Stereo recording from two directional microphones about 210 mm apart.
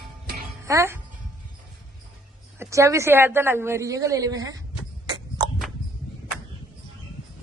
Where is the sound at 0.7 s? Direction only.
15° right (ahead or behind).